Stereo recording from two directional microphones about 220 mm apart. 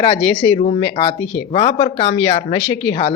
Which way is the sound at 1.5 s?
25° left (ahead or behind).